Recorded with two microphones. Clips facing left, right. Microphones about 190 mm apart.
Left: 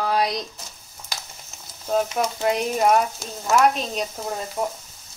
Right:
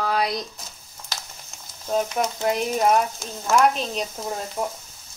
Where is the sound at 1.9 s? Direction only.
Centre (ahead or behind).